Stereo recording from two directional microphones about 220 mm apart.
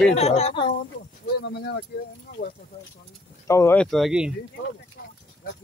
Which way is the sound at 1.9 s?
45° left (ahead or behind).